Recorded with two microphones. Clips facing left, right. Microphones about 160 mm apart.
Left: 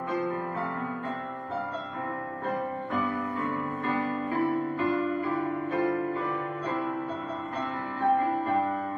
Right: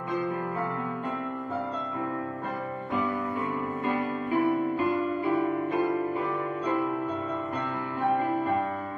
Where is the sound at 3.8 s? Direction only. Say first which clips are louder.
Even; 15° right (ahead or behind).